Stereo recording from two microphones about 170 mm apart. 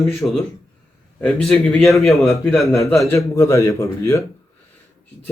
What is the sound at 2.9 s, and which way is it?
Speech, 15° left (ahead or behind).